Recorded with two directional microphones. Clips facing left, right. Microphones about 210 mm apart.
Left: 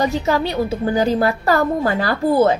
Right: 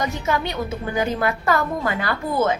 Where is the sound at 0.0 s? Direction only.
35° left (ahead or behind).